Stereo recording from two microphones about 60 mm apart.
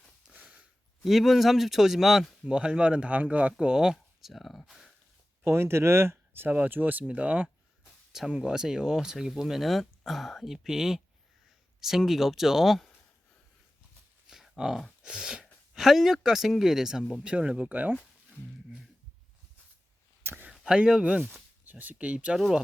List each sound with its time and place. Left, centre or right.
0.3 s a sound: right
1.0 s speech: centre
2.5 s speech: centre
3.9 s speech: centre
5.5 s speech: right
6.5 s speech: right
8.3 s speech: centre
14.3 s a sound: centre
15.0 s speech: centre
17.2 s speech: centre
20.5 s speech: centre
21.6 s speech: right
22.4 s speech: centre